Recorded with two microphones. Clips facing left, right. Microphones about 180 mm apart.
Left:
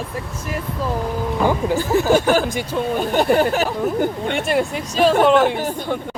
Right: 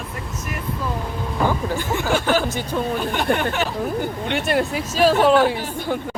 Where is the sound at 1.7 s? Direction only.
40° left (ahead or behind).